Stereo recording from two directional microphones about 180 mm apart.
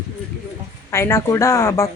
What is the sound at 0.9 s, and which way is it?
Speech, 15° left (ahead or behind).